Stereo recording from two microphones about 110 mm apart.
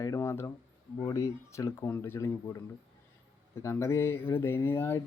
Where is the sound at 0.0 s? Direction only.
25° left (ahead or behind).